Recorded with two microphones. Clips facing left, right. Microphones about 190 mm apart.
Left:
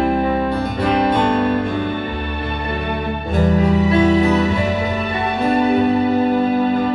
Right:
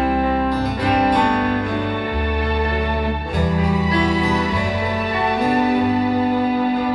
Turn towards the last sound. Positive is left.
turn(degrees=25)  # may be behind; listen again after turning